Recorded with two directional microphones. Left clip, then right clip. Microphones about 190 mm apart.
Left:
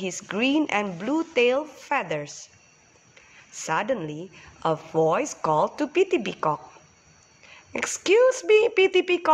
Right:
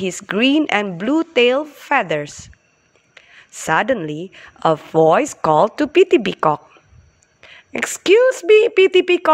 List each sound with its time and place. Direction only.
0.0 s speech: 40° right (ahead or behind)